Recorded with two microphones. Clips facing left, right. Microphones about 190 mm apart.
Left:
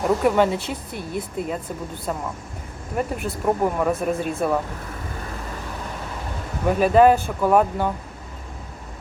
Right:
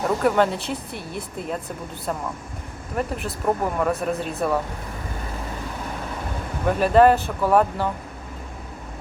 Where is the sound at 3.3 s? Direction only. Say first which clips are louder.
Left 3 dB; 10° left (ahead or behind).